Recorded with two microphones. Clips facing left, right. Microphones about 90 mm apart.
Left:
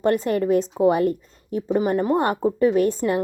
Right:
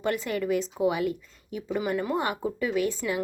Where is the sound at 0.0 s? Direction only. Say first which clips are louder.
Left 8 dB; 40° left (ahead or behind).